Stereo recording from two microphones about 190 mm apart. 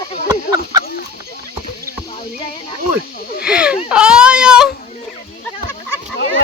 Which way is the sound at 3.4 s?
5° right (ahead or behind).